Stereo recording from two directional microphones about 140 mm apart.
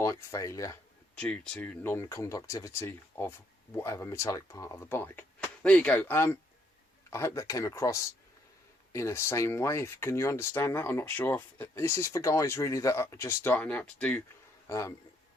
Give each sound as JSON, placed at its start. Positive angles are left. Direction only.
{"t": 0.0, "sound": "speech", "side_deg": 20}
{"t": 1.1, "sound": "speech", "side_deg": 10}
{"t": 14.7, "sound": "speech", "side_deg": 20}